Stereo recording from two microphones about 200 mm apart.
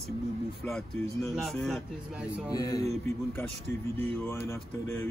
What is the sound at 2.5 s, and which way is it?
Speech, 20° left (ahead or behind).